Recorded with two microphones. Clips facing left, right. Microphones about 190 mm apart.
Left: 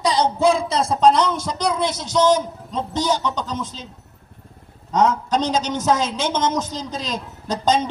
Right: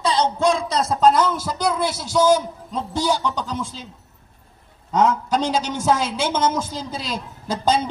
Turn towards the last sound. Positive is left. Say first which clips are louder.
# left 1 dB
turn(degrees=-10)  # may be behind; listen again after turning